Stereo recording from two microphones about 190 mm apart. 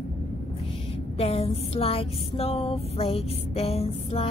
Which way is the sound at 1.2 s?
35° left (ahead or behind).